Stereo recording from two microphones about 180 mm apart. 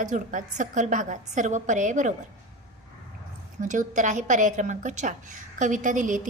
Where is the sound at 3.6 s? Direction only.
45° right (ahead or behind).